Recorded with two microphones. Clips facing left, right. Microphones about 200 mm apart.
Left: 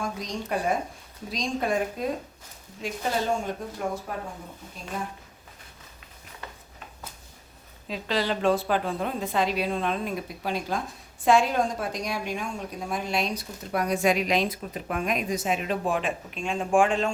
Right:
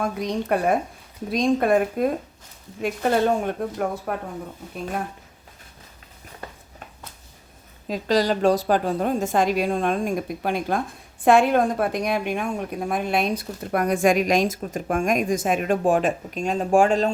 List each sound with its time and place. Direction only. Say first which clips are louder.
0.0 s speech: right 7 dB; 60° right (ahead or behind)
7.9 s a woman's voice: right 6 dB; 45° right (ahead or behind)